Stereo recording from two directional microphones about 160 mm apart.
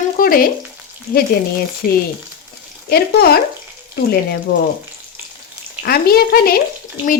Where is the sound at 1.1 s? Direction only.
70° left (ahead or behind).